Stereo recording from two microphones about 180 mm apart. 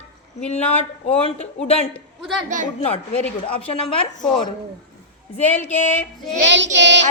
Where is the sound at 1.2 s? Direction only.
35° left (ahead or behind).